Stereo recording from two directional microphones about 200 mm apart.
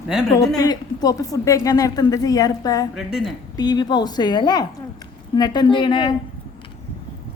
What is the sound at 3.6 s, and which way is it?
A woman's voice, 20° left (ahead or behind).